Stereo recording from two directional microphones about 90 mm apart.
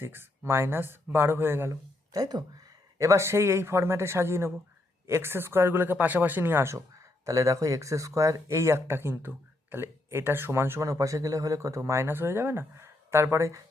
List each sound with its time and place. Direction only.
0.0 s speech: 25° right (ahead or behind)
1.7 s speech: 45° right (ahead or behind)
3.0 s speech: 30° right (ahead or behind)